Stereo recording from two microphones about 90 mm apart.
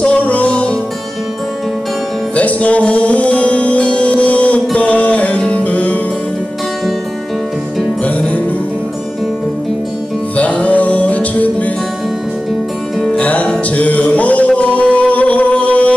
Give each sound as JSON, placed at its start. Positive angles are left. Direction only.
{"t": 0.0, "sound": "music", "side_deg": 15}
{"t": 2.3, "sound": "music", "side_deg": 15}
{"t": 8.0, "sound": "music", "side_deg": 15}
{"t": 10.3, "sound": "music", "side_deg": 15}
{"t": 13.2, "sound": "music", "side_deg": 15}